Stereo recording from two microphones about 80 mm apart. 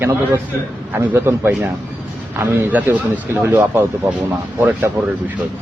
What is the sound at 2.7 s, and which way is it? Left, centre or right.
Speech, centre.